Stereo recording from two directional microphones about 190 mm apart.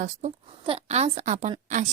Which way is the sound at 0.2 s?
35° right (ahead or behind).